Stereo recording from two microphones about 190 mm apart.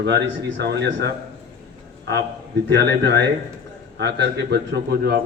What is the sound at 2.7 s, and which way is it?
A man's voice, 65° right (ahead or behind).